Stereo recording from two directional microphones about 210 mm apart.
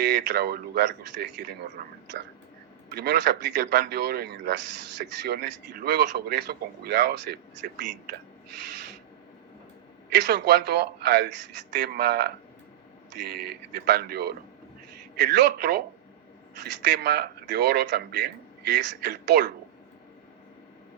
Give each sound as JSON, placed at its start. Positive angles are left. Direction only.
{"t": 0.0, "sound": "speech", "side_deg": -55}
{"t": 10.1, "sound": "speech", "side_deg": -55}
{"t": 16.8, "sound": "speech", "side_deg": -55}